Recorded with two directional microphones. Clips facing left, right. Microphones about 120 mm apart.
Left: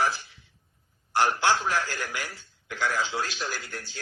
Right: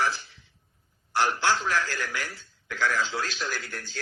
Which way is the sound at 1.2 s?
45° left (ahead or behind).